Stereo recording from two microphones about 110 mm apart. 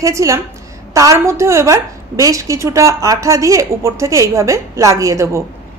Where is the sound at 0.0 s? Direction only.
30° right (ahead or behind).